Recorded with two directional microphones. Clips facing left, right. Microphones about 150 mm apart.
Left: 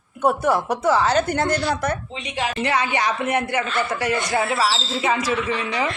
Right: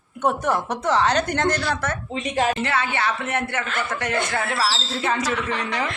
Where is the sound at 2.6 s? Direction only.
15° left (ahead or behind).